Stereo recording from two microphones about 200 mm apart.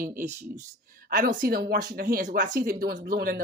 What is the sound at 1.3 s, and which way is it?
Speech, 50° right (ahead or behind).